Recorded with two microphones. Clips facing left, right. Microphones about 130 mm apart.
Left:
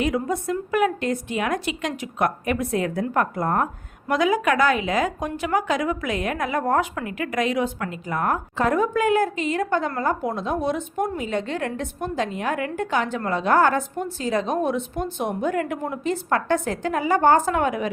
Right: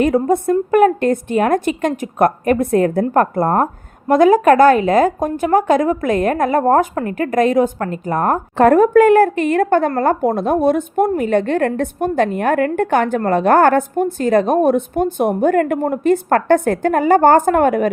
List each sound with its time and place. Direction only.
0.0 s a woman's voice: 50° right (ahead or behind)